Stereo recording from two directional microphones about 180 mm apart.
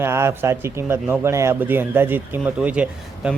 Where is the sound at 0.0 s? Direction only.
15° right (ahead or behind).